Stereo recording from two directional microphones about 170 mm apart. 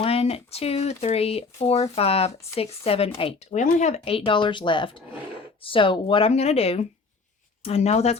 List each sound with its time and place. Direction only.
0.0 s speech: 35° left (ahead or behind)